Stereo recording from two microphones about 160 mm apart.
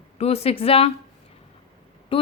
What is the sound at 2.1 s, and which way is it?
Speech, 35° left (ahead or behind).